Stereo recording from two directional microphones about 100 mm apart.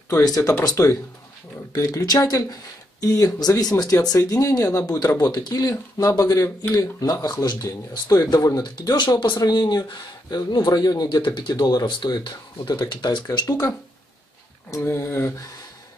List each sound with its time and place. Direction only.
0.2 s speech: 35° left (ahead or behind)